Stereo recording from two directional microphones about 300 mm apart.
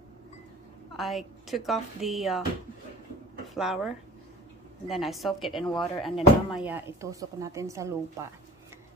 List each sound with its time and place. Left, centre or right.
0.9 s speech: centre
3.5 s speech: centre